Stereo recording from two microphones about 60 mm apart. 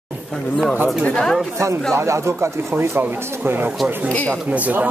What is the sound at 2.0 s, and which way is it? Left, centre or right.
Speech, right.